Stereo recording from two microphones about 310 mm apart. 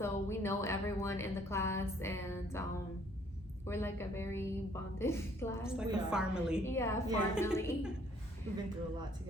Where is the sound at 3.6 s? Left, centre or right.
Centre.